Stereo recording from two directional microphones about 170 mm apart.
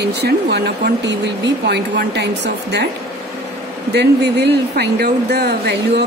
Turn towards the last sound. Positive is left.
turn(degrees=-75)  # may be behind; listen again after turning